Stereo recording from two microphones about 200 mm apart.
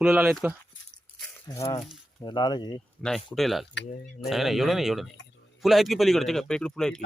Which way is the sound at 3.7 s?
60° left (ahead or behind).